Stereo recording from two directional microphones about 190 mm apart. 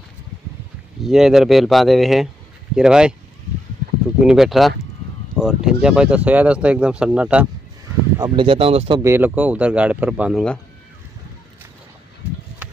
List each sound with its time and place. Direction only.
1.0 s speech: 5° right (ahead or behind)
4.2 s speech: 5° right (ahead or behind)
8.2 s speech: 25° right (ahead or behind)
9.0 s speech: 10° right (ahead or behind)